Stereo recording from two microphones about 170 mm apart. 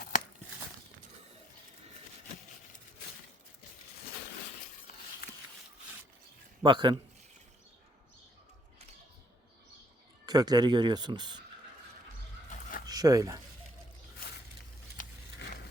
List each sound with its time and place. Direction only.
5.2 s a sound: 65° left (ahead or behind)
6.6 s a man's voice: 25° right (ahead or behind)
10.2 s speech: 25° right (ahead or behind)
12.9 s speech: 20° right (ahead or behind)